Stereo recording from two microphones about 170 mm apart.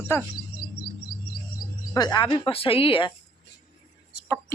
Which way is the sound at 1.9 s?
25° left (ahead or behind).